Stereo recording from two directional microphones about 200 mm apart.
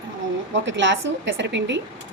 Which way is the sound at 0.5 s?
65° right (ahead or behind).